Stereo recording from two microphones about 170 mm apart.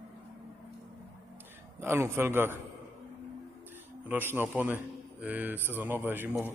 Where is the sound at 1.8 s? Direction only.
15° right (ahead or behind).